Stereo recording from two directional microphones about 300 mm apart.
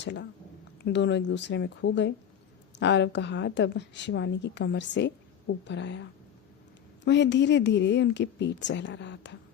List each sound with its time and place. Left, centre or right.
0.0 s a woman's voice: left